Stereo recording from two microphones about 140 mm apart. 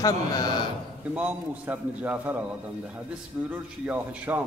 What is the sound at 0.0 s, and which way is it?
Speech, 30° left (ahead or behind).